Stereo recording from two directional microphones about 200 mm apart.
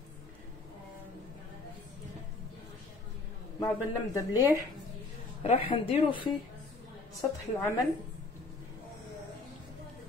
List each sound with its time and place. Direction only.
3.5 s speech: 15° left (ahead or behind)
5.4 s speech: 30° left (ahead or behind)
7.2 s speech: 15° left (ahead or behind)